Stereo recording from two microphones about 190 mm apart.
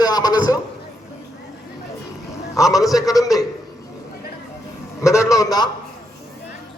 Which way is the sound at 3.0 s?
20° left (ahead or behind).